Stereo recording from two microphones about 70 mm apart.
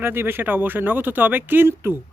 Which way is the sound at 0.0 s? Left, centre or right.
Right.